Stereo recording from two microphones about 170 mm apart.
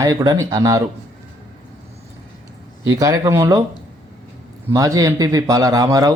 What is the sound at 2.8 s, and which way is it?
Speech, 20° right (ahead or behind).